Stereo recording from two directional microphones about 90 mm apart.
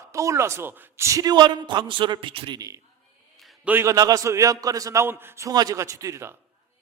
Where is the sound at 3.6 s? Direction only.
20° right (ahead or behind).